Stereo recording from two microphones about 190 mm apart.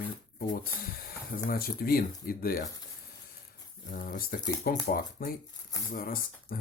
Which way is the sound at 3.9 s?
45° left (ahead or behind).